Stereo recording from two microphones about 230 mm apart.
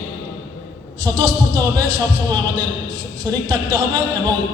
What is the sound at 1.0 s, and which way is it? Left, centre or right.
A man's voice, centre.